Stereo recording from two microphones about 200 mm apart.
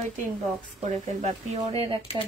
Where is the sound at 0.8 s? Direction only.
30° right (ahead or behind).